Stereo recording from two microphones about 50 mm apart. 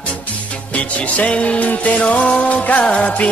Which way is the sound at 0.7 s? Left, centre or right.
Left.